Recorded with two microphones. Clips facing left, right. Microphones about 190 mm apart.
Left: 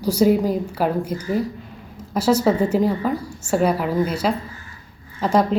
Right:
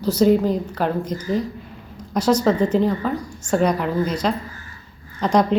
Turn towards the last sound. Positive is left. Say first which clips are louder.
# right 1 dB
turn(degrees=5)  # may be behind; listen again after turning